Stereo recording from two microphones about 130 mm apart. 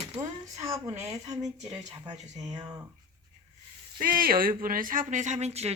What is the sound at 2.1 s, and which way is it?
Speech, 60° right (ahead or behind).